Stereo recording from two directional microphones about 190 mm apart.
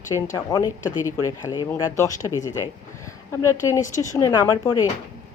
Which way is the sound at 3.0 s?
15° left (ahead or behind).